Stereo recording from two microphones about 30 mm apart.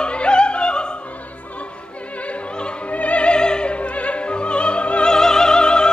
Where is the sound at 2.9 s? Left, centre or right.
Left.